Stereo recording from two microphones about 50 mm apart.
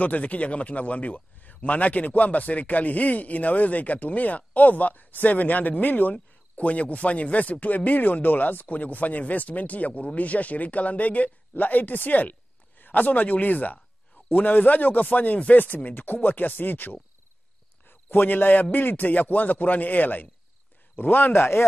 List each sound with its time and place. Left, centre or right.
0.0 s speech: left